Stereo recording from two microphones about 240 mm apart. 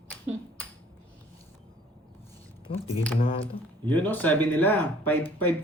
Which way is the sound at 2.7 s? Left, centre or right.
Left.